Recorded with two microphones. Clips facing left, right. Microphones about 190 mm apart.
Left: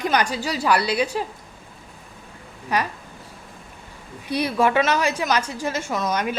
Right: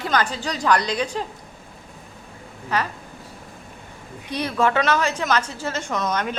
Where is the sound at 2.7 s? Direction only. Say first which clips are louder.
Left 1 dB; 10° left (ahead or behind).